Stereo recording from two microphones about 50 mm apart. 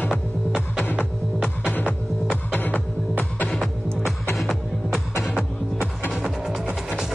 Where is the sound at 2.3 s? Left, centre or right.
Left.